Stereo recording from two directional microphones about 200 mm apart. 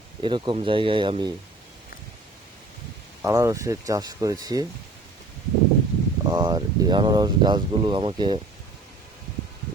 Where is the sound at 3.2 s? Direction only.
15° right (ahead or behind).